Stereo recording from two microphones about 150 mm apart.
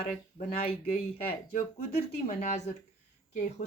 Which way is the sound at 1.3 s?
85° left.